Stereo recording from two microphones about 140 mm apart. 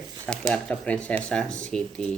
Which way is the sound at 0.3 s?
5° left (ahead or behind).